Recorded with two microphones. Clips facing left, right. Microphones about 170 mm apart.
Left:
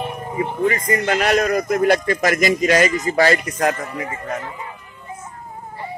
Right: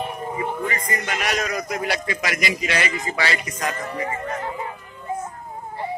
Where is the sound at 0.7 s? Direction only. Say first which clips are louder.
Left 8 dB; 55° left (ahead or behind).